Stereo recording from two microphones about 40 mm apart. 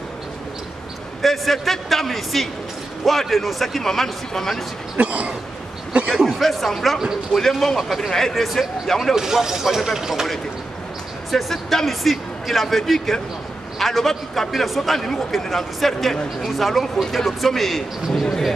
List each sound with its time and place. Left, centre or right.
1.2 s speech: centre
4.9 s speech: right
6.0 s speech: centre
9.1 s speech: centre
11.3 s speech: centre